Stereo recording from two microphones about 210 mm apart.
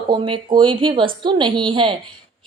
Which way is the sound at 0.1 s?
20° right (ahead or behind).